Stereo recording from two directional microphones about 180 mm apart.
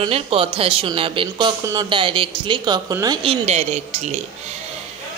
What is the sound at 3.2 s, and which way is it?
Speech, 35° right (ahead or behind).